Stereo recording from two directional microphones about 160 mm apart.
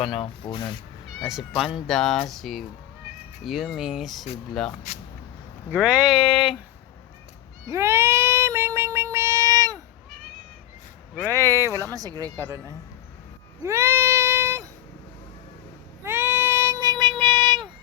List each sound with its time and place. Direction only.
0.0 s speech: 35° left (ahead or behind)
1.2 s speech: centre (ahead or behind)
5.7 s speech: 5° right (ahead or behind)
7.7 s cat: 15° right (ahead or behind)
11.1 s speech: 5° left (ahead or behind)
11.3 s speech: 20° right (ahead or behind)
13.7 s child singing: 15° right (ahead or behind)
16.0 s child singing: 15° right (ahead or behind)